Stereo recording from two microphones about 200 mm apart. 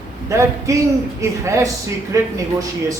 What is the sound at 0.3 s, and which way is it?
A man's voice, 15° right (ahead or behind).